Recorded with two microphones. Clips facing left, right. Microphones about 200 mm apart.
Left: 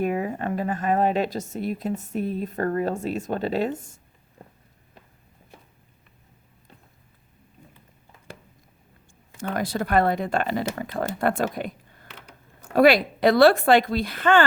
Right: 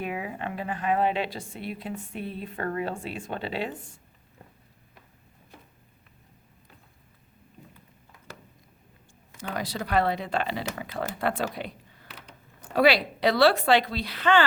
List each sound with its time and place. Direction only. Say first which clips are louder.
0.0 s speech: left 7 dB; 45° left (ahead or behind)
9.4 s speech: left 6 dB; 50° left (ahead or behind)
12.7 s speech: left 5 dB; 50° left (ahead or behind)